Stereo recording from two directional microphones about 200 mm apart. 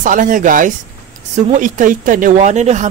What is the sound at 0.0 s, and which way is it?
Speech, 40° right (ahead or behind).